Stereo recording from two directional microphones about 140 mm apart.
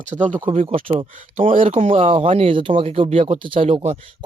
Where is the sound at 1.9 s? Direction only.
40° right (ahead or behind).